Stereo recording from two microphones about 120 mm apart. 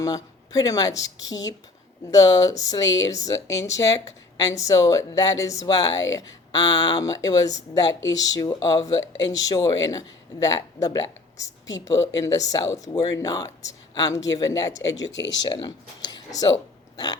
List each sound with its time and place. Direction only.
0.0 s a woman's voice: 30° left (ahead or behind)